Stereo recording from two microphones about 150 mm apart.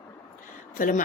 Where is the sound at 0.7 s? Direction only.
65° left (ahead or behind).